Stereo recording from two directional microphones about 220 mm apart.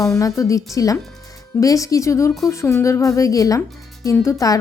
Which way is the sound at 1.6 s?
15° left (ahead or behind).